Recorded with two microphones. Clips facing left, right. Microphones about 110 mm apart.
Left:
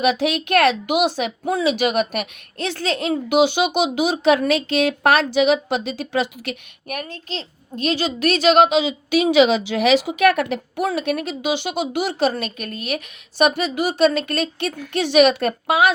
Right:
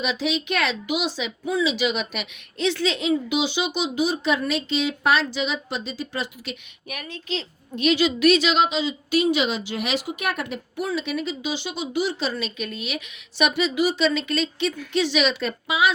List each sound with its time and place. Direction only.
0.0 s speech: 60° left (ahead or behind)
6.9 s speech: 45° left (ahead or behind)